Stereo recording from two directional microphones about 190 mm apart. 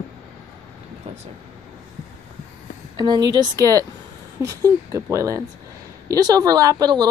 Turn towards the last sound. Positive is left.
turn(degrees=-20)  # may be behind; listen again after turning